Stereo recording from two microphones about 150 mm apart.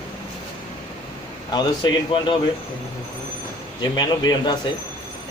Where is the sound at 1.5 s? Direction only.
30° left (ahead or behind).